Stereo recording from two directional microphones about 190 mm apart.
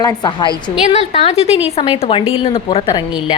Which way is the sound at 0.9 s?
35° left (ahead or behind).